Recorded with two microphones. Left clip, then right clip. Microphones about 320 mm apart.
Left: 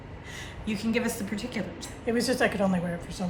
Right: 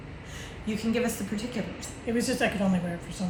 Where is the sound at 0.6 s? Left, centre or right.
Centre.